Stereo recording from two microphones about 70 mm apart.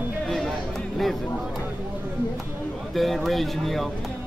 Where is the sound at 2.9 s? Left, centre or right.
Centre.